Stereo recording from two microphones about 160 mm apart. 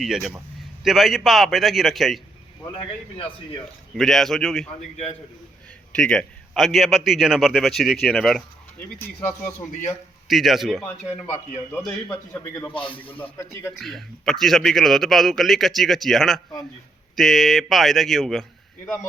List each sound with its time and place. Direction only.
0.0 s a man's voice: centre (ahead or behind)
3.9 s a man's voice: centre (ahead or behind)
5.9 s a man's voice: 5° left (ahead or behind)
10.2 s a man's voice: centre (ahead or behind)
10.8 s a man's voice: 10° left (ahead or behind)
13.7 s a man's voice: centre (ahead or behind)